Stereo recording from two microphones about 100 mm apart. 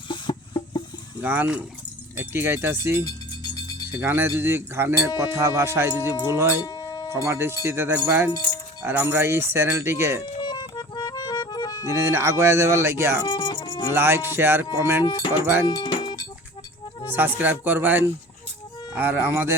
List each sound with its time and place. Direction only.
0.1 s a sound: 50° left (ahead or behind)
1.2 s speech: 20° right (ahead or behind)
3.1 s music: 40° left (ahead or behind)
3.9 s speech: 20° right (ahead or behind)
6.6 s music: 45° left (ahead or behind)
7.3 s speech: 30° right (ahead or behind)
10.2 s accordion: 45° left (ahead or behind)
11.9 s speech: 30° right (ahead or behind)
13.2 s music: 50° left (ahead or behind)
13.9 s speech: 25° right (ahead or behind)
15.6 s music: 45° left (ahead or behind)
17.1 s speech: 20° right (ahead or behind)